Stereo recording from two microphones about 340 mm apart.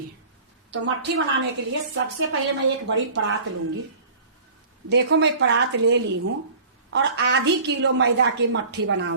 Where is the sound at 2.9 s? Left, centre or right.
Right.